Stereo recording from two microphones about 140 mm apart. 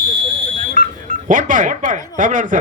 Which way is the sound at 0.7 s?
65° right (ahead or behind).